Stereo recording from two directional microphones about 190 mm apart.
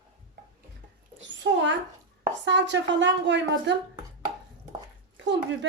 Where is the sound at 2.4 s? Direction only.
70° right (ahead or behind).